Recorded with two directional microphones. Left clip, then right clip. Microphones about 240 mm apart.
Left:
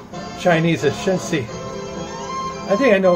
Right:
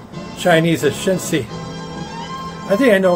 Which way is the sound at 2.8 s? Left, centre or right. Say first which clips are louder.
Right 1 dB; centre.